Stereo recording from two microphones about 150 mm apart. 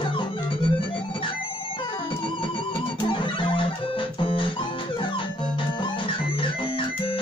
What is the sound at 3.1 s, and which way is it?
Music, 35° left (ahead or behind).